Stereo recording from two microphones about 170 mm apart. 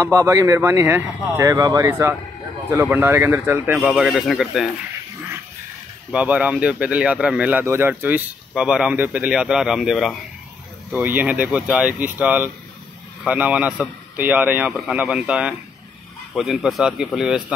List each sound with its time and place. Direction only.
0.0 s speech: 20° right (ahead or behind); by 4.6 s centre (ahead or behind)
6.1 s a man's voice: 5° right (ahead or behind)